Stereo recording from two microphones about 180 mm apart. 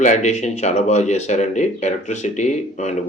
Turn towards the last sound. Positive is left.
turn(degrees=40)  # may be behind; listen again after turning